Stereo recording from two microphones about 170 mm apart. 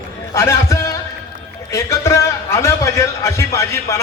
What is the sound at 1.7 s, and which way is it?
A man's voice, 15° left (ahead or behind).